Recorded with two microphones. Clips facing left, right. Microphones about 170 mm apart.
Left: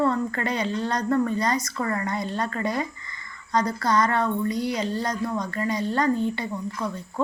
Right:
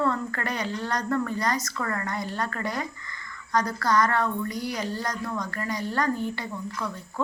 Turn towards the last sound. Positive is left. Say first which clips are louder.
# left 3 dB
turn(degrees=25)  # may be behind; listen again after turning